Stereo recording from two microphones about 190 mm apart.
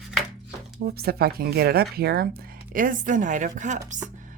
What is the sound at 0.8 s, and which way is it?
A woman's voice, 55° right (ahead or behind).